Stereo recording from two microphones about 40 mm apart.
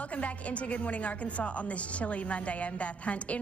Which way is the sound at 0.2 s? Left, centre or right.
Left.